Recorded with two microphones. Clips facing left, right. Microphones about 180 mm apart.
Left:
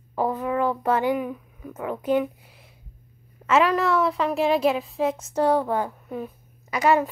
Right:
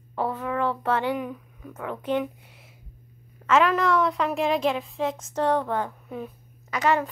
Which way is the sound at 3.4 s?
5° left (ahead or behind).